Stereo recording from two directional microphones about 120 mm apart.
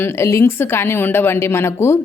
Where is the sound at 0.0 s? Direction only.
20° left (ahead or behind).